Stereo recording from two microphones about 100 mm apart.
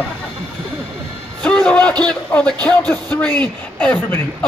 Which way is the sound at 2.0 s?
10° left (ahead or behind).